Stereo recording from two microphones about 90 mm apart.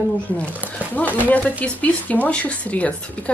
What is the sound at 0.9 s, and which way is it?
Speech, 20° left (ahead or behind).